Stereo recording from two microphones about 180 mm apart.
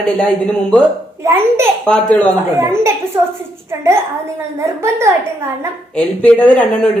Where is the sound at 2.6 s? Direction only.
15° right (ahead or behind).